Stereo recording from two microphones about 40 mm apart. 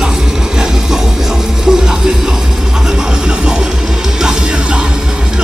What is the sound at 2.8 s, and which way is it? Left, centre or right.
Scratch, right.